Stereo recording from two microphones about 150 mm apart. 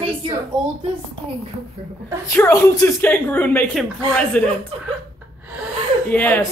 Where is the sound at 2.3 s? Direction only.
15° left (ahead or behind).